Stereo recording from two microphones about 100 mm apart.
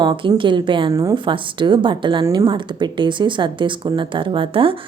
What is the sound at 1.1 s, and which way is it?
Speech, 55° right (ahead or behind).